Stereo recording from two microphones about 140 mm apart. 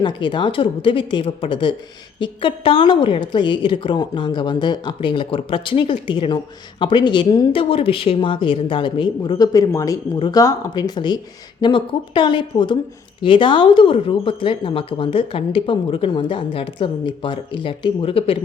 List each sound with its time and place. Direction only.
0.0 s a woman's voice: 35° left (ahead or behind)